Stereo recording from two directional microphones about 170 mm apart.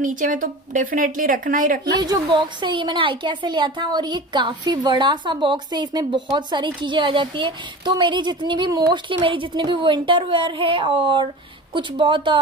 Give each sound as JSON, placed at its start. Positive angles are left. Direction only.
{"t": 0.0, "sound": "a woman's voice", "side_deg": -50}
{"t": 2.0, "sound": "a woman's voice", "side_deg": -25}